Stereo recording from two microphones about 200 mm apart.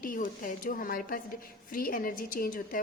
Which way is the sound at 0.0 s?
45° left (ahead or behind).